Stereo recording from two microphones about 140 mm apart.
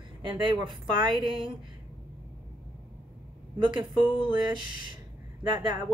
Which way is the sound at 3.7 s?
35° right (ahead or behind).